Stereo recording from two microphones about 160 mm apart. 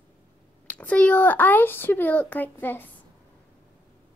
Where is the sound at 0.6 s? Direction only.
10° left (ahead or behind).